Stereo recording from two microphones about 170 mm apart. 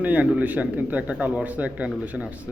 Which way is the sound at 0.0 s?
10° right (ahead or behind).